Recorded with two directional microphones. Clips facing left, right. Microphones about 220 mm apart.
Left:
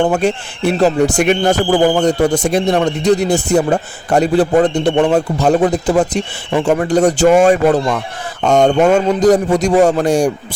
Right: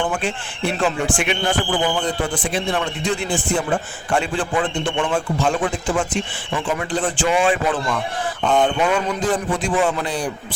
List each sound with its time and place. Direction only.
0.1 s a man's voice: 40° left (ahead or behind)